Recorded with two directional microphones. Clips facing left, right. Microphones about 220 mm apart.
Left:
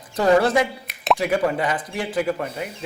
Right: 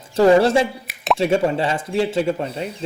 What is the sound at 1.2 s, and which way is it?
Speech, 25° right (ahead or behind).